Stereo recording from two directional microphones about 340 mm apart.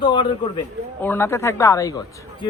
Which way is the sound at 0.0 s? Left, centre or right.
Centre.